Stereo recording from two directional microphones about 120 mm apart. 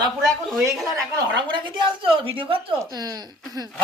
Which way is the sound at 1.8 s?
45° right (ahead or behind).